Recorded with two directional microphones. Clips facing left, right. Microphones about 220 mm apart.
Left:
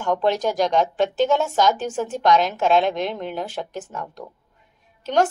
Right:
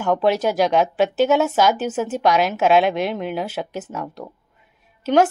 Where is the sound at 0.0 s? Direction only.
5° right (ahead or behind).